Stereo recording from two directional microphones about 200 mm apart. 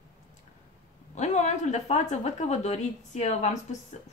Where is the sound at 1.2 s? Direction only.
35° left (ahead or behind).